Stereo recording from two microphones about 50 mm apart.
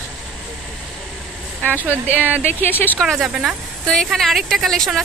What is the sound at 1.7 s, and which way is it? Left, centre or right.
Speech, right.